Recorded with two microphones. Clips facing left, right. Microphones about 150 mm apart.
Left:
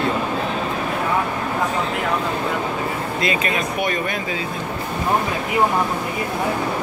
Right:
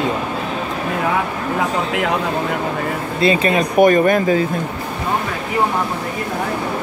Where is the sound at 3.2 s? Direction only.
30° right (ahead or behind).